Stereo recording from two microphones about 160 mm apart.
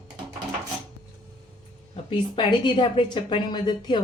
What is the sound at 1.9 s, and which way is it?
A woman's voice, 30° left (ahead or behind).